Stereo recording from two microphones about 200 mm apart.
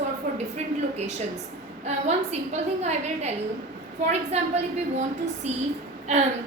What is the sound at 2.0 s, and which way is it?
A woman's voice, 35° right (ahead or behind).